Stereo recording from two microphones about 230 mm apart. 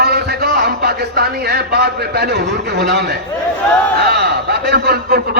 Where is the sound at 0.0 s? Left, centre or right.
Right.